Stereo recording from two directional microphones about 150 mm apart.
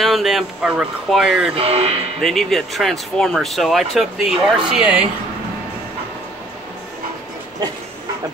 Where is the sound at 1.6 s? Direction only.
40° right (ahead or behind).